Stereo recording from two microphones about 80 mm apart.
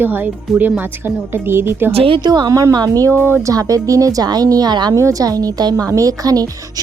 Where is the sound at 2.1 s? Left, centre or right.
Right.